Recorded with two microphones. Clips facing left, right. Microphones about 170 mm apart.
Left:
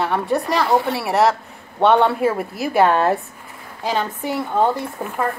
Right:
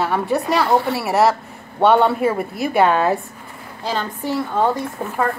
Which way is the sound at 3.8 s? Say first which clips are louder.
Left 1 dB; 15° left (ahead or behind).